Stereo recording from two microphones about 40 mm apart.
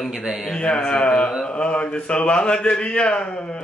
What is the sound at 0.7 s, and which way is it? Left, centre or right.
Speech, left.